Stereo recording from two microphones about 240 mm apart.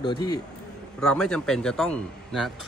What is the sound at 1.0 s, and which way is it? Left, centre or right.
Speech, centre.